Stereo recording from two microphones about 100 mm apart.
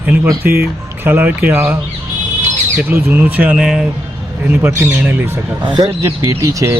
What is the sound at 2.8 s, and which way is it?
Speech, 20° right (ahead or behind).